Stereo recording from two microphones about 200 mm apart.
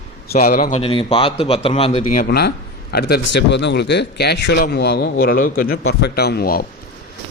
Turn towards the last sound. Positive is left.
turn(degrees=50)  # may be behind; listen again after turning